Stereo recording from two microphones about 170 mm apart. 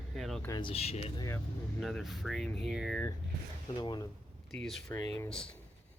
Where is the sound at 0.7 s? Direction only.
35° left (ahead or behind).